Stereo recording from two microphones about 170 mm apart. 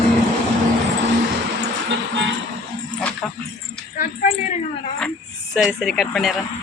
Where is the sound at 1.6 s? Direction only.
90° right.